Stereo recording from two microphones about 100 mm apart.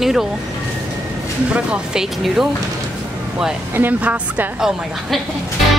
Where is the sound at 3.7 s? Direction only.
15° right (ahead or behind).